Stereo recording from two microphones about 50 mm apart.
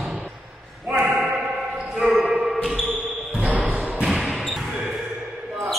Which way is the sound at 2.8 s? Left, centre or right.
Right.